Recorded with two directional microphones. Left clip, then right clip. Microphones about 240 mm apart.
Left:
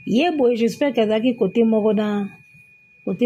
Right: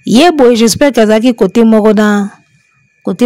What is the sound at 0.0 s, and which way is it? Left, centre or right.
Speech, right.